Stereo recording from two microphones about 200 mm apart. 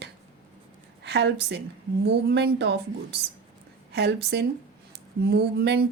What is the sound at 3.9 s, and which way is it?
A woman's voice, 55° right (ahead or behind).